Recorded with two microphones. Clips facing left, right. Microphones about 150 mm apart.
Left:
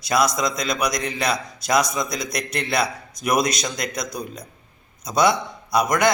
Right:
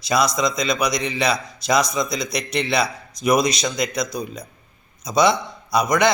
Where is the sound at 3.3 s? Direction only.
55° left (ahead or behind).